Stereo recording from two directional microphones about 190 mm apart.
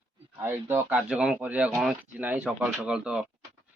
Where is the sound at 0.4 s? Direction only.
10° right (ahead or behind).